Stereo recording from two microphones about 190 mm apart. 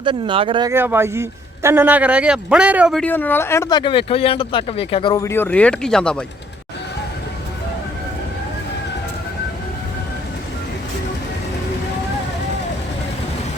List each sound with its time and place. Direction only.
0.0 s speech: 25° right (ahead or behind)
0.7 s speech: 10° right (ahead or behind)
3.0 s speech: 10° left (ahead or behind)